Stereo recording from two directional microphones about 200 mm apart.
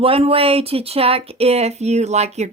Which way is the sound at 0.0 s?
30° right (ahead or behind).